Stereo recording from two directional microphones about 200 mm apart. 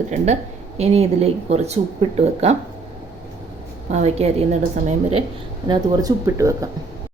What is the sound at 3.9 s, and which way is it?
Speech, 30° right (ahead or behind).